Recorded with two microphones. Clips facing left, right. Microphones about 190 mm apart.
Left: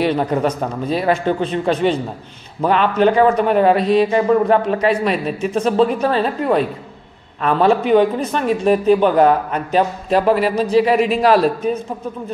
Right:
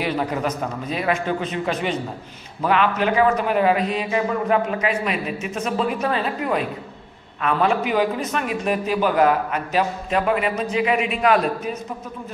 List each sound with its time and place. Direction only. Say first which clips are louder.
0.0 s speech: left 6 dB; 30° left (ahead or behind)